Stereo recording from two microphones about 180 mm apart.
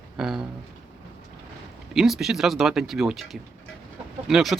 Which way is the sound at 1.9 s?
Centre (ahead or behind).